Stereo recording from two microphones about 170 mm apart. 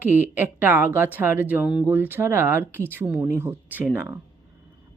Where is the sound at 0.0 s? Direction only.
10° right (ahead or behind).